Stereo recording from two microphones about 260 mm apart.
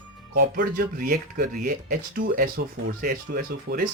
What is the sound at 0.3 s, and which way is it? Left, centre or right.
Speech, right.